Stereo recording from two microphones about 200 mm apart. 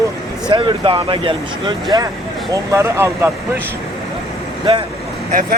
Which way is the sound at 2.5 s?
15° right (ahead or behind).